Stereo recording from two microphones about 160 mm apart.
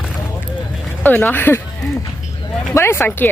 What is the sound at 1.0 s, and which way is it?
Speech, 10° left (ahead or behind).